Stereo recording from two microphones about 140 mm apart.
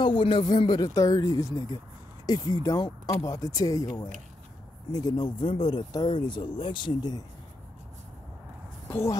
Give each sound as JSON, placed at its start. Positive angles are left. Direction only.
{"t": 0.0, "sound": "speech", "side_deg": 35}